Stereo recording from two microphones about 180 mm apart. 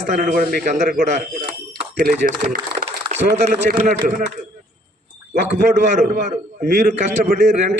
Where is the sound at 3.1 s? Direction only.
40° right (ahead or behind).